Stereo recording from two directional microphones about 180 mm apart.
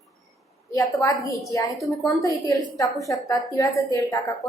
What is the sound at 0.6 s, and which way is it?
A woman's voice, 20° left (ahead or behind).